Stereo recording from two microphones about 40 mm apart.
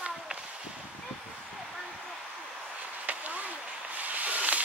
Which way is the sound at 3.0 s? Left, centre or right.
Right.